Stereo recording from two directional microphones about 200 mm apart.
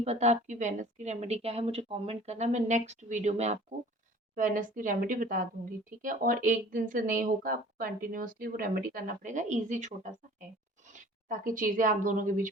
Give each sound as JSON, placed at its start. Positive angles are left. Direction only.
{"t": 0.0, "sound": "a woman's voice", "side_deg": -35}